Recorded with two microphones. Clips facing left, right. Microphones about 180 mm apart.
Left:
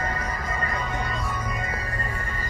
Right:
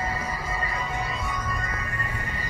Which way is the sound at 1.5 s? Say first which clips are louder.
Left 2 dB; 25° left (ahead or behind).